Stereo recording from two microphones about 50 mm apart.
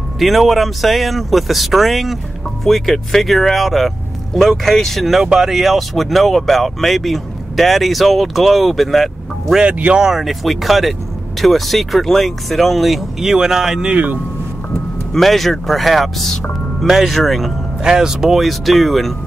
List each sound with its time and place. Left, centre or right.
0.2 s speech: centre
9.6 s speech: right
10.0 s speech: centre
13.9 s speech: right
15.1 s speech: centre
17.1 s speech: centre
17.8 s speech: centre